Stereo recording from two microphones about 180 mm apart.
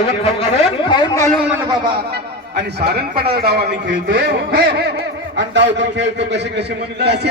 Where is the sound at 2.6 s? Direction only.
65° right (ahead or behind).